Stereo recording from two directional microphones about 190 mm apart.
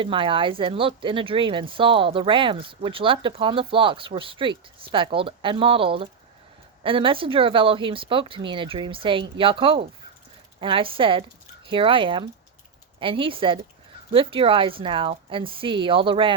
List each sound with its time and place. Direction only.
0.0 s speech: 25° right (ahead or behind)